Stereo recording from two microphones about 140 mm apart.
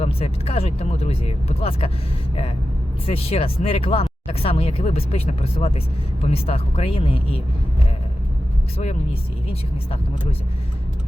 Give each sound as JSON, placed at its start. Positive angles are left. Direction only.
{"t": 0.0, "sound": "speech", "side_deg": 45}
{"t": 3.1, "sound": "speech", "side_deg": 45}